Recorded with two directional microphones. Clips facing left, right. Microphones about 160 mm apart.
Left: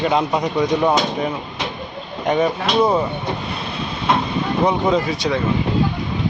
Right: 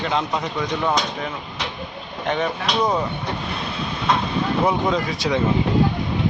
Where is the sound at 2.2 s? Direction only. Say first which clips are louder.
Left 5 dB; 10° left (ahead or behind).